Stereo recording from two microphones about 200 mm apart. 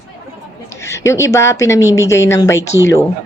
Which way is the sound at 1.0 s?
15° left (ahead or behind).